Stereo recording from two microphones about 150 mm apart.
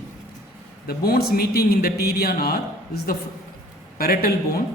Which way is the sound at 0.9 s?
90° left.